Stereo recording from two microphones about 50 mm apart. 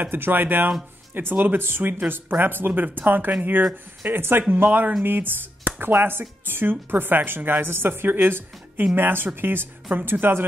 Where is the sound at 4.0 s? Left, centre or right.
Right.